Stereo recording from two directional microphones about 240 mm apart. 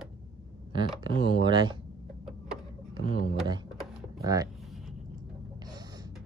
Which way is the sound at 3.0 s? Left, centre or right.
Left.